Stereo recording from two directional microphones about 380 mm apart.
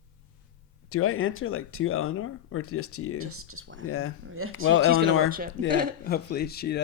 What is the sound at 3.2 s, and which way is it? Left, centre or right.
Speech, right.